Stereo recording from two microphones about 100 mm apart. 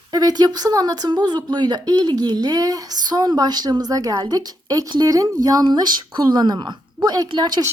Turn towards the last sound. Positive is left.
turn(degrees=-45)  # may be behind; listen again after turning